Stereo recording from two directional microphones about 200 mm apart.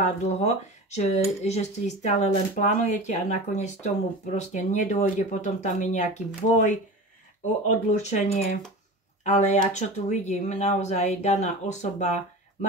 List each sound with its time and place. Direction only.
0.0 s speech: 35° left (ahead or behind)
8.0 s speech: 35° left (ahead or behind)